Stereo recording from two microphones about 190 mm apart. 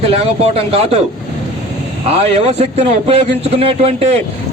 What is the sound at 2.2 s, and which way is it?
A man's voice, 35° right (ahead or behind).